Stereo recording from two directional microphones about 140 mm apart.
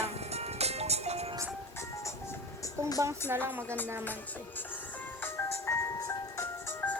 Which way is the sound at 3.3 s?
15° right (ahead or behind).